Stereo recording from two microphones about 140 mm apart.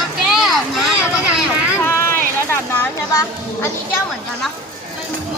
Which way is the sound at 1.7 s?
15° left (ahead or behind).